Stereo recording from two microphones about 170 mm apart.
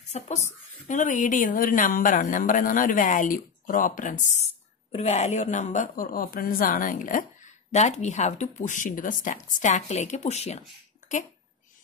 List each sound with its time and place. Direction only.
0.1 s a woman's voice: 40° left (ahead or behind)